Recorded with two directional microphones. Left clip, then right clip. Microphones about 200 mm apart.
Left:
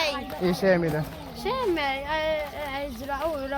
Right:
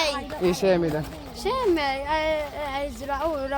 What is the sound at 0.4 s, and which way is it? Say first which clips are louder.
Speech: right 1 dB; centre (ahead or behind).